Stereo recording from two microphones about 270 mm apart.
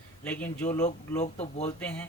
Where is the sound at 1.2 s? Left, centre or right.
Left.